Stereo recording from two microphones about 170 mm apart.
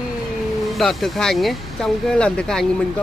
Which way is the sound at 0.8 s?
Centre (ahead or behind).